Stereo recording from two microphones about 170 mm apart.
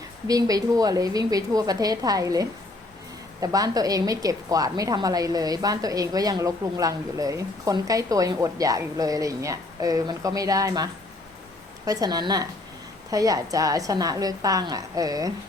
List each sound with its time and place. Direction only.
0.3 s a woman's voice: 20° right (ahead or behind)
11.9 s a woman's voice: 20° right (ahead or behind)